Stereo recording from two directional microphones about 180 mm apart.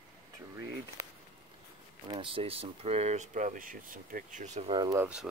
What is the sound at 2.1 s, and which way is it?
Speech, 30° right (ahead or behind).